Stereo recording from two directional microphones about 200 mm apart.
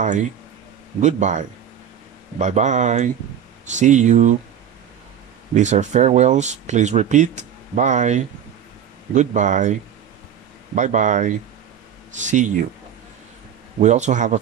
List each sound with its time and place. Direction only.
1.0 s speech: 35° right (ahead or behind)
5.5 s speech: 35° right (ahead or behind)
13.7 s speech: 35° right (ahead or behind)